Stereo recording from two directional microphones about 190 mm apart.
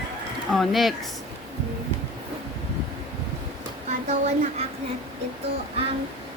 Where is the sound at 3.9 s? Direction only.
35° right (ahead or behind).